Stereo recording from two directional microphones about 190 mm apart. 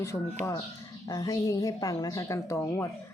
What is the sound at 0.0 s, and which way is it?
A woman's voice, 15° left (ahead or behind).